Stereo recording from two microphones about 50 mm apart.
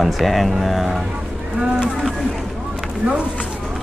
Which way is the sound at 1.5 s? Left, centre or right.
Centre.